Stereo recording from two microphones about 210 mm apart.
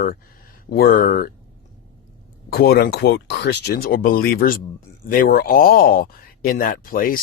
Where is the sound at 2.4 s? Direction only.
45° left (ahead or behind).